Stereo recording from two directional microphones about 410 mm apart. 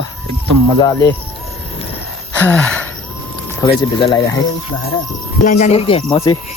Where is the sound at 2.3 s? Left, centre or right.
Centre.